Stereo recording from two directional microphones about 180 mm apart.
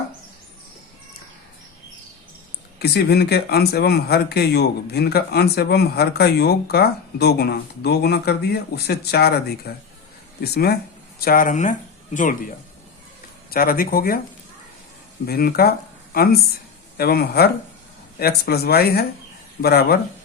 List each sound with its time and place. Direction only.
2.7 s speech: 65° left (ahead or behind)
15.3 s speech: 60° left (ahead or behind)